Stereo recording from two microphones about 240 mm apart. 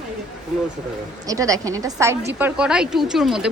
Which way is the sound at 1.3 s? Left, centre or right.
Centre.